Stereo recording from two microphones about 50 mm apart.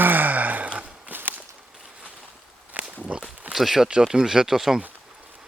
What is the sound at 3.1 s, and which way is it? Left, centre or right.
Speech, right.